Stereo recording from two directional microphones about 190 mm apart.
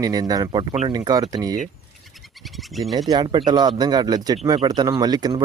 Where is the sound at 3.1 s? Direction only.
25° right (ahead or behind).